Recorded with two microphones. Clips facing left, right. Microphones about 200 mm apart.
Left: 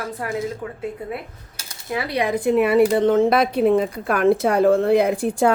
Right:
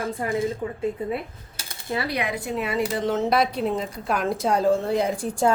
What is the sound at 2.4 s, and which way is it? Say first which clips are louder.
Speech: left 10 dB; 60° left (ahead or behind).